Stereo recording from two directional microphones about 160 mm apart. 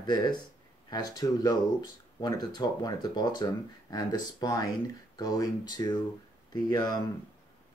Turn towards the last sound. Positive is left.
turn(degrees=25)  # may be behind; listen again after turning